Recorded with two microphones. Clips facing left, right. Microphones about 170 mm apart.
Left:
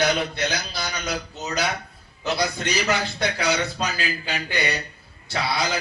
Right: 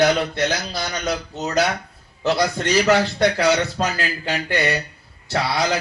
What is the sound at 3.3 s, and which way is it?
Speech, 60° right (ahead or behind).